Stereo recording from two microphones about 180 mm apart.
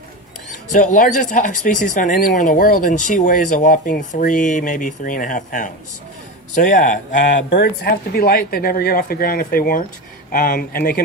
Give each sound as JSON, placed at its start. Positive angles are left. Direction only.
{"t": 0.7, "sound": "speech", "side_deg": 45}
{"t": 7.5, "sound": "speech", "side_deg": 60}